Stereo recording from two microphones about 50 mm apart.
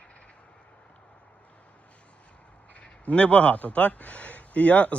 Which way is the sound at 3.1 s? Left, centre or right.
Left.